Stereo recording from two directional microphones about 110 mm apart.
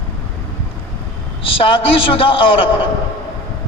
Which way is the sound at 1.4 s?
55° left (ahead or behind).